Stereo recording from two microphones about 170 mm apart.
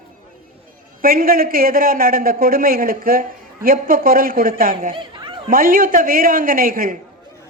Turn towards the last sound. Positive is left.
turn(degrees=-55)  # may be behind; listen again after turning